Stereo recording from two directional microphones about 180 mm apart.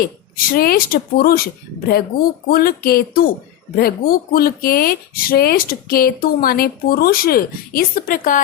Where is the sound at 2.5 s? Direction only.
55° left (ahead or behind).